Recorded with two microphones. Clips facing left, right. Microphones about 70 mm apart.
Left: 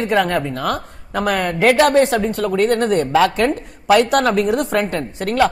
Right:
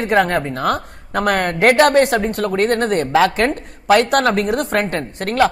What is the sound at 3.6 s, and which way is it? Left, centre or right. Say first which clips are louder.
A woman's voice: even; right.